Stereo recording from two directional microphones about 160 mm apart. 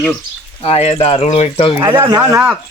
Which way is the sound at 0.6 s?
40° left (ahead or behind).